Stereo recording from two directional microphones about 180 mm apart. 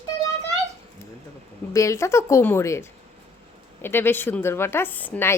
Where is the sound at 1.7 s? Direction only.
15° left (ahead or behind).